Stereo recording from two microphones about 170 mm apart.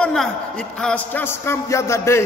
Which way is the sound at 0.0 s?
5° left (ahead or behind).